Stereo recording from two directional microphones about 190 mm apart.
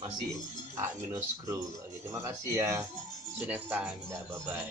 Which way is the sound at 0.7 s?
15° right (ahead or behind).